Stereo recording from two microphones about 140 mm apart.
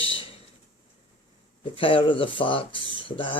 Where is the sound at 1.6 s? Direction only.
40° left (ahead or behind).